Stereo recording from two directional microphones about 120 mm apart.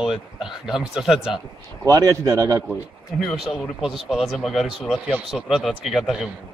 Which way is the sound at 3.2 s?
5° left (ahead or behind).